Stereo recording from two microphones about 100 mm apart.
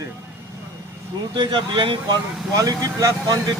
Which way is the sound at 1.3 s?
50° right (ahead or behind).